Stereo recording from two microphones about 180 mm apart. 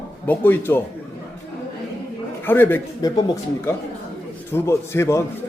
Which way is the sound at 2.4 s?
10° left (ahead or behind).